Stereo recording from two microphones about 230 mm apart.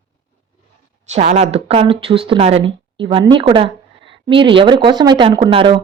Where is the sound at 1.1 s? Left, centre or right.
Right.